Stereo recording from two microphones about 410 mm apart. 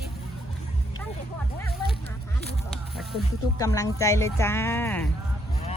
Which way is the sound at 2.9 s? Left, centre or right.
Centre.